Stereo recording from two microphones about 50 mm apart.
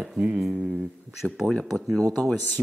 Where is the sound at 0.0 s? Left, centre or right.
Centre.